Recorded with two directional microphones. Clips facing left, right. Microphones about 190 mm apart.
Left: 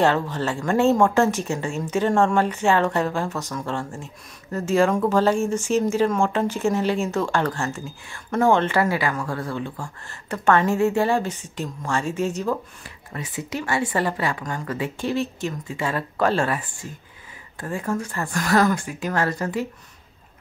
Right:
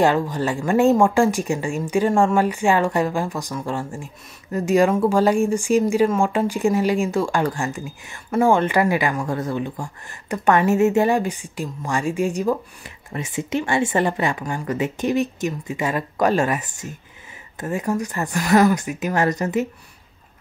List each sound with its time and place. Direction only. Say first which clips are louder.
0.0 s speech: right 2 dB; 10° right (ahead or behind)
13.1 s speech: right 6 dB; 25° right (ahead or behind)